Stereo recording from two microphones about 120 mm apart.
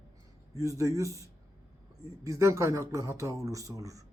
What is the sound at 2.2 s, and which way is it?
A man's voice, 25° right (ahead or behind).